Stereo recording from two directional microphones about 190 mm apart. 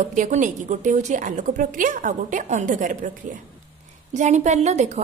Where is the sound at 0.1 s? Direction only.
40° right (ahead or behind).